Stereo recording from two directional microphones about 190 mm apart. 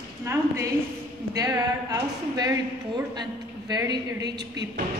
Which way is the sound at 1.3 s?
20° right (ahead or behind).